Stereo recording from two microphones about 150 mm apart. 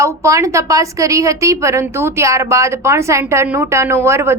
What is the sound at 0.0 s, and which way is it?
A woman's voice, 20° right (ahead or behind).